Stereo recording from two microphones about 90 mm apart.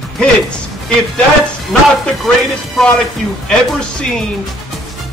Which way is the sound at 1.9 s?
Centre (ahead or behind).